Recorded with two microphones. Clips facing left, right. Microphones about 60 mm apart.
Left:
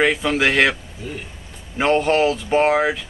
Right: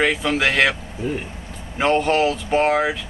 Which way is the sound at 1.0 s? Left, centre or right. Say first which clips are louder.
Right 7 dB; right.